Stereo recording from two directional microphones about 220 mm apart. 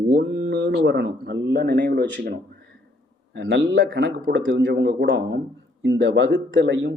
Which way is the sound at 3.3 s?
55° right (ahead or behind).